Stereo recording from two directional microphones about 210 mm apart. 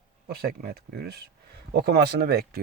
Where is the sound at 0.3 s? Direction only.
45° right (ahead or behind).